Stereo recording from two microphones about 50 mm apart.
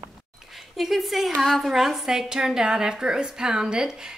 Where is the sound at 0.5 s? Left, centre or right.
Centre.